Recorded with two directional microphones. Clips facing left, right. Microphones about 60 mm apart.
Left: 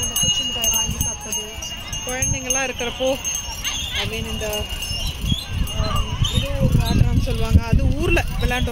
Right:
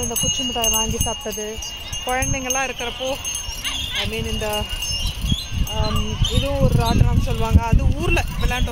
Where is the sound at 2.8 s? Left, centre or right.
Centre.